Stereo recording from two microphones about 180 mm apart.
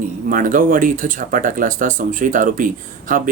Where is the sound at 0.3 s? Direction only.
50° right (ahead or behind).